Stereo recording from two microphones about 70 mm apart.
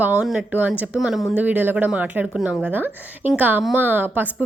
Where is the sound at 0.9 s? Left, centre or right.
Centre.